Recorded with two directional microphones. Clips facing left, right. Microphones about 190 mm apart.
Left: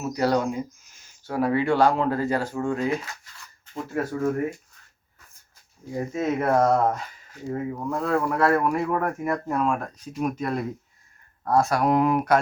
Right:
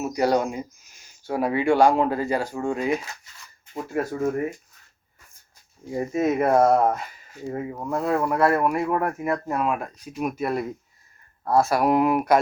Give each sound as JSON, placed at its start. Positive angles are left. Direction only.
{"t": 0.1, "sound": "speech", "side_deg": -15}
{"t": 5.9, "sound": "speech", "side_deg": -15}